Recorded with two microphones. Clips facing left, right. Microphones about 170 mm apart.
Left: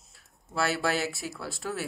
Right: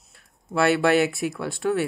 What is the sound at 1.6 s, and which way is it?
Speech, 60° right (ahead or behind).